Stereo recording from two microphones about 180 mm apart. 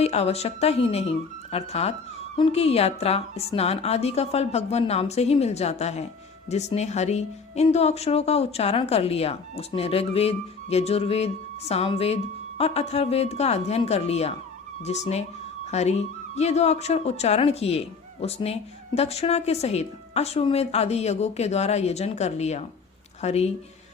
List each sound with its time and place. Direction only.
0.0 s speech: 35° left (ahead or behind)